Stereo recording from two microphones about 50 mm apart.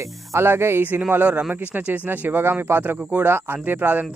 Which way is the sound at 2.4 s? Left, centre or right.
Right.